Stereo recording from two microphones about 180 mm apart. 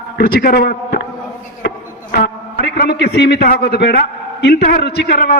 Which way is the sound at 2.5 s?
60° left (ahead or behind).